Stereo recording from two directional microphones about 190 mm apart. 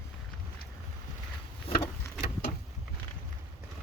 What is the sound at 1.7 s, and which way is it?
Vehicle, 30° left (ahead or behind).